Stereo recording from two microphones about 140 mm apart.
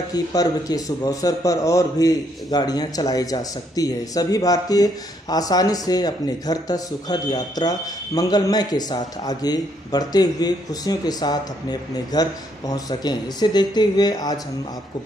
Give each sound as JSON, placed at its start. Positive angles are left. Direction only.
{"t": 0.1, "sound": "a man's voice", "side_deg": 25}